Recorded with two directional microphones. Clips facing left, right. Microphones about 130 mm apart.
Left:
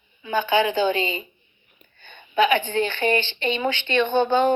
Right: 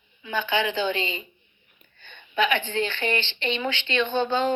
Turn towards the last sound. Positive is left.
turn(degrees=50)  # may be behind; listen again after turning